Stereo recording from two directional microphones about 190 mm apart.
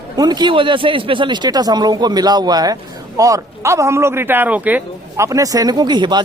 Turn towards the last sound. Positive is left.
turn(degrees=-25)  # may be behind; listen again after turning